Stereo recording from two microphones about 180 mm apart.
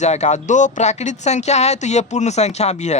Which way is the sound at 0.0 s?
40° left (ahead or behind).